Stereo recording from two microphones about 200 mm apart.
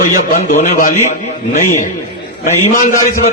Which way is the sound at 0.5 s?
40° left (ahead or behind).